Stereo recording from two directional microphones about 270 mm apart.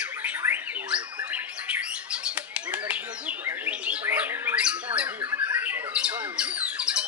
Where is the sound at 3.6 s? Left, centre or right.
Centre.